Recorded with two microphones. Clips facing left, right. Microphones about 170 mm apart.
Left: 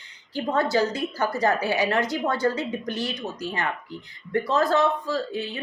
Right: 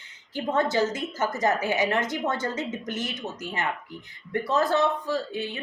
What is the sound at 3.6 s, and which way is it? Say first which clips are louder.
A woman's voice: left 1 dB; 20° right (ahead or behind).